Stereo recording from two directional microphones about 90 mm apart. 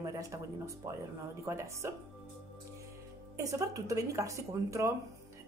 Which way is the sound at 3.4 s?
40° right (ahead or behind).